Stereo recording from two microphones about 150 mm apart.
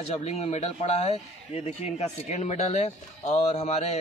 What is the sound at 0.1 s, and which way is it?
A man's voice, 45° left (ahead or behind).